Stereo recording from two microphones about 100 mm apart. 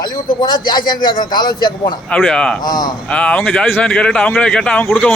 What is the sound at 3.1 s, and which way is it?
Speech, 10° left (ahead or behind).